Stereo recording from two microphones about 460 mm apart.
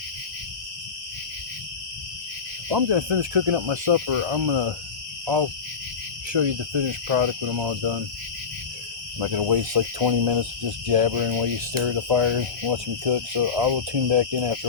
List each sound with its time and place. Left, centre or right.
2.6 s speech: right
6.3 s speech: right
7.8 s cricket: right
9.2 s cricket: right
10.8 s speech: right